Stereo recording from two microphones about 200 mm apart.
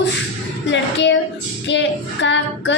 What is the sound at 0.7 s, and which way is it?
A woman's voice, 60° left (ahead or behind).